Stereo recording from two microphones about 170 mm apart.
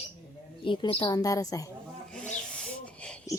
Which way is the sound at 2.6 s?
5° left (ahead or behind).